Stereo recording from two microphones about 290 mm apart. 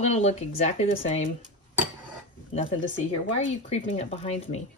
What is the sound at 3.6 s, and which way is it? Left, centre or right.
Speech, left.